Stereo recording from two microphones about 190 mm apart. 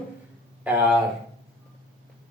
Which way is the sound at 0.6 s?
10° right (ahead or behind).